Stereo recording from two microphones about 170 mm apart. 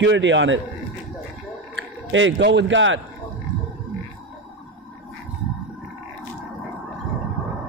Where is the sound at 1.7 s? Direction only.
90° right.